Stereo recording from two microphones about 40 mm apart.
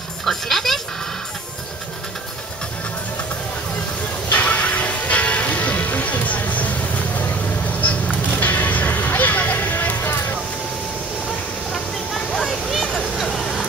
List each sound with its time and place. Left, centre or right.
0.2 s music: centre
4.3 s music: left
8.3 s music: left
12.4 s a sound: centre
13.3 s vehicle: centre